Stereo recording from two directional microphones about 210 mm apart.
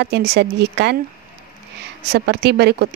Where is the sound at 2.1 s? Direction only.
50° right (ahead or behind).